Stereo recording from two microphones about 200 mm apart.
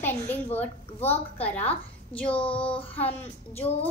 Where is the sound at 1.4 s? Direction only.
10° left (ahead or behind).